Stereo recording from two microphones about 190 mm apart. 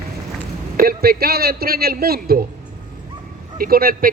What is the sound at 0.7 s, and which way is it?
A man's voice, 50° right (ahead or behind).